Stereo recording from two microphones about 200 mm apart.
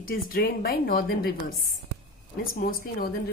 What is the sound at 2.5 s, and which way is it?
Speech, 45° left (ahead or behind).